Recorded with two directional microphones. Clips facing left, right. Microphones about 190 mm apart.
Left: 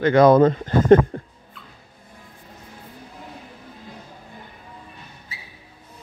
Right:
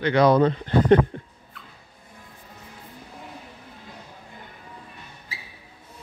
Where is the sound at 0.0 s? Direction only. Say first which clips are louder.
Left 4 dB; 50° left (ahead or behind).